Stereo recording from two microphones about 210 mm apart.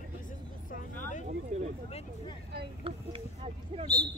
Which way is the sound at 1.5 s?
30° right (ahead or behind).